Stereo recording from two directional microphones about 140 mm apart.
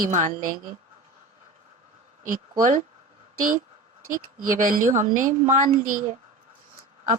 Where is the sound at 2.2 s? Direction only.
70° right (ahead or behind).